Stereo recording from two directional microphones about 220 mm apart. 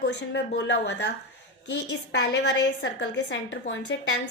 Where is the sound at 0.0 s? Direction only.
50° left (ahead or behind).